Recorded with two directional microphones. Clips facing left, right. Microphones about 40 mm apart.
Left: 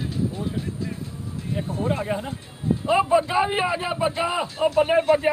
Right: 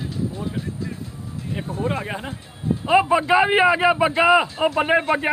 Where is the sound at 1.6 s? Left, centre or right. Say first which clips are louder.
Even; right.